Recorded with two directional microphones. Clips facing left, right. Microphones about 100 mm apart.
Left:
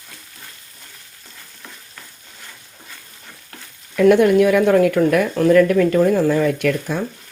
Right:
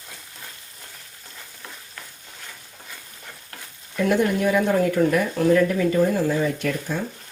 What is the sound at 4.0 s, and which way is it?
Speech, 75° left (ahead or behind).